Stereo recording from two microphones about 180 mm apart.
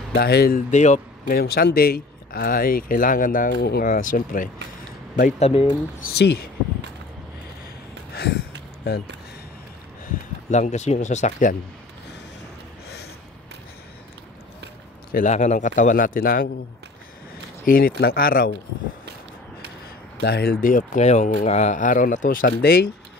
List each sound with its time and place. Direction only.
0.1 s speech: 60° left (ahead or behind)
0.7 s speech: 40° left (ahead or behind)
5.5 s speech: 30° left (ahead or behind)
6.1 s speech: 65° left (ahead or behind)
8.1 s a sound: 60° left (ahead or behind)
10.5 s speech: 40° left (ahead or behind)
15.1 s speech: 40° left (ahead or behind)
17.6 s speech: 55° left (ahead or behind)
20.2 s speech: 60° left (ahead or behind)
20.6 s speech: 45° left (ahead or behind)